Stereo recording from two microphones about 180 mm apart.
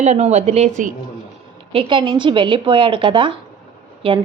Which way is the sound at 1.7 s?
25° right (ahead or behind).